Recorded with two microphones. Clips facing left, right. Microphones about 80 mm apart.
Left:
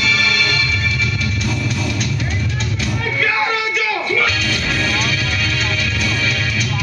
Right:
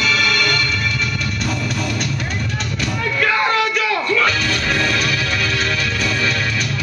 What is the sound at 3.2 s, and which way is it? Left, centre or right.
Music, right.